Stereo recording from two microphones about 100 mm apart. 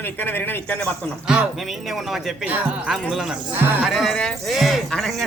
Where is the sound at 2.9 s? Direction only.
5° right (ahead or behind).